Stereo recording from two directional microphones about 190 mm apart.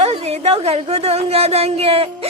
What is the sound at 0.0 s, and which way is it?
A woman's voice, 35° right (ahead or behind).